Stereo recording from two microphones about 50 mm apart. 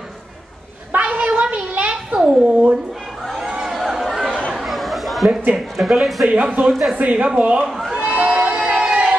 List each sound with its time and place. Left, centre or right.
1.0 s a sound: right
2.1 s a sound: centre
3.4 s chatter: centre
5.8 s speech: centre
6.2 s speech: right
6.7 s speech: centre
7.0 s speech: right
7.6 s a sound: centre
7.9 s crowd: right